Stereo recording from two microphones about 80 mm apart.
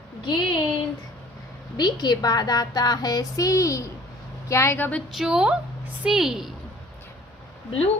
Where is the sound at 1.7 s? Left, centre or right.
Left.